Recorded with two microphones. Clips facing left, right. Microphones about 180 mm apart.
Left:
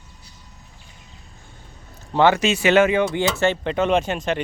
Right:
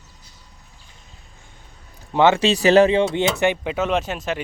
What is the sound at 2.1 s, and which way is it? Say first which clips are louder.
Speech: right 1 dB; 20° right (ahead or behind).